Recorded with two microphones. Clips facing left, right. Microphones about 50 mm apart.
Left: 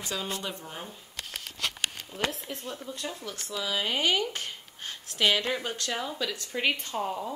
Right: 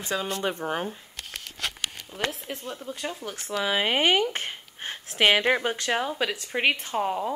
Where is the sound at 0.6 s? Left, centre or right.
Right.